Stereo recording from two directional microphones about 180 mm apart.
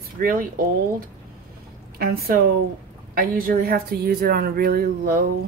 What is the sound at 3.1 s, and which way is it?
Speech, 55° right (ahead or behind).